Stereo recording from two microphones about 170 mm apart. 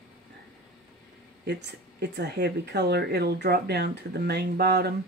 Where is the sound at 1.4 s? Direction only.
80° right.